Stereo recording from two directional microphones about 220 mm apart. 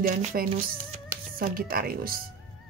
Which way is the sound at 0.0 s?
40° right (ahead or behind).